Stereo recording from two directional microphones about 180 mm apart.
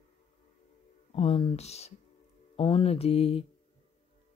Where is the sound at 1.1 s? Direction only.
30° left (ahead or behind).